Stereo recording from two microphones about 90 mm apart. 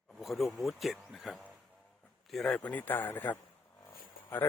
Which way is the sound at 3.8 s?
20° left (ahead or behind).